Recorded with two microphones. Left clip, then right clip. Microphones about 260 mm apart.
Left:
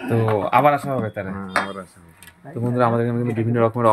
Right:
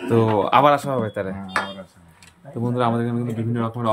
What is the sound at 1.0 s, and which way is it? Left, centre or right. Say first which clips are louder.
Speech: right 2 dB; centre.